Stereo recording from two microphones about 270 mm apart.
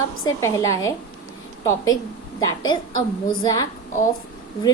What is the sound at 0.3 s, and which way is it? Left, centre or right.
Speech, centre.